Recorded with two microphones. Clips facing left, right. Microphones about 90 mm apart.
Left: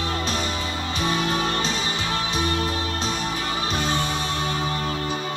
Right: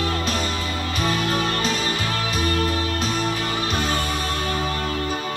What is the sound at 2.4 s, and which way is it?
Music, 45° right (ahead or behind).